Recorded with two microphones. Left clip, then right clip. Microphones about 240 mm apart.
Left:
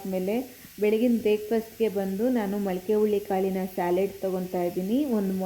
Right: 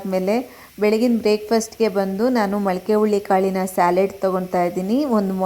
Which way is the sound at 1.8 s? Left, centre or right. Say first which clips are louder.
Right 6 dB; centre.